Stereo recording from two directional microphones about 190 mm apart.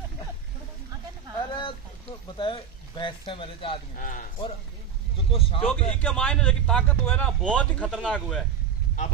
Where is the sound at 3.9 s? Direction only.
45° left (ahead or behind).